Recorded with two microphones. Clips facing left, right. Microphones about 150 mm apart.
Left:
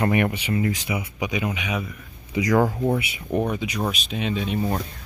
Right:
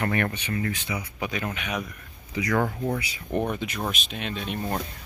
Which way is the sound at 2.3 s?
20° left (ahead or behind).